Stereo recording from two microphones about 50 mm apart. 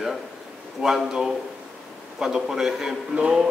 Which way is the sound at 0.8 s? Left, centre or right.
Centre.